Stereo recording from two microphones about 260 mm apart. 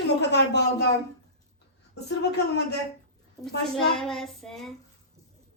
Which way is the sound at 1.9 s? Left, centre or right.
Left.